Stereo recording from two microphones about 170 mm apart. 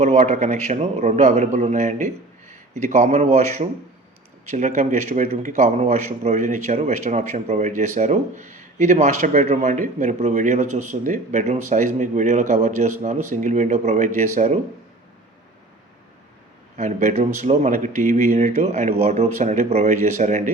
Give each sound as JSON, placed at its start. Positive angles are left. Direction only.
{"t": 0.0, "sound": "a man's voice", "side_deg": -40}
{"t": 16.7, "sound": "a man's voice", "side_deg": -45}